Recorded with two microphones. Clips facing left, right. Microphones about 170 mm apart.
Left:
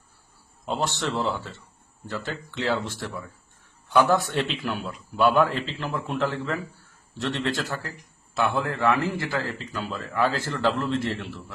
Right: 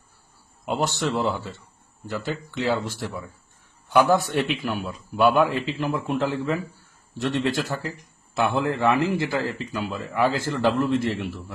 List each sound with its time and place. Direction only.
0.6 s a man's voice: 10° right (ahead or behind)